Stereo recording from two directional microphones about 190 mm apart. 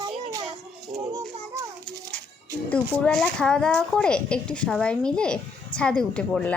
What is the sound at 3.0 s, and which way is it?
A woman's voice, 5° left (ahead or behind).